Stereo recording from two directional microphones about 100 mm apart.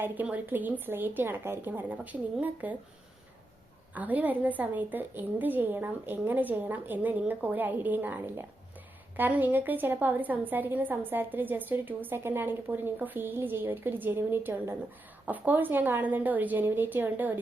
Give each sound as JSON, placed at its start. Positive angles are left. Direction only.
{"t": 0.0, "sound": "a woman's voice", "side_deg": -15}
{"t": 3.9, "sound": "a woman's voice", "side_deg": -15}